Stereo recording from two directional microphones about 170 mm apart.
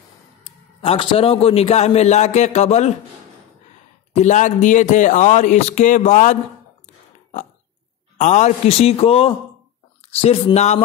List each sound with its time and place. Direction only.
0.4 s a man's voice: 30° left (ahead or behind)
4.1 s a man's voice: 45° left (ahead or behind)
8.2 s a man's voice: 45° left (ahead or behind)